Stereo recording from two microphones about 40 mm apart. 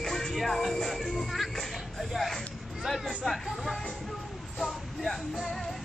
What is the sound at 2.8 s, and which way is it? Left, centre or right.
Chatter, centre.